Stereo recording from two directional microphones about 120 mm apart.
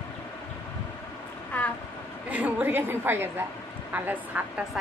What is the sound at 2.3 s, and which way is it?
A woman's voice, 15° right (ahead or behind).